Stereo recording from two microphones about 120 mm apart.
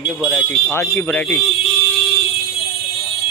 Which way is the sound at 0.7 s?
15° left (ahead or behind).